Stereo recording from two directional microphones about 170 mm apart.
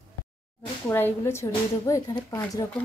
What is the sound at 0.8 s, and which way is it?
Speech, 10° left (ahead or behind).